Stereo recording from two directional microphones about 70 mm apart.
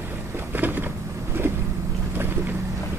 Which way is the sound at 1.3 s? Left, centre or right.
Right.